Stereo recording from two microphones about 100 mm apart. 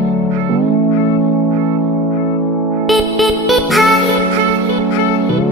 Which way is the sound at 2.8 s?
Centre (ahead or behind).